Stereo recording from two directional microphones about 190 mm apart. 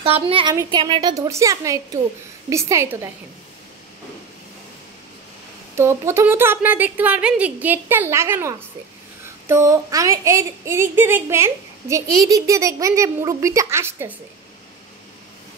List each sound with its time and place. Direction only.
0.0 s a woman's voice: 30° right (ahead or behind)
5.8 s a woman's voice: 15° right (ahead or behind)